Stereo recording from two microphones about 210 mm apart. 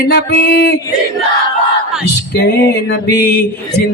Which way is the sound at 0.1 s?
50° left (ahead or behind).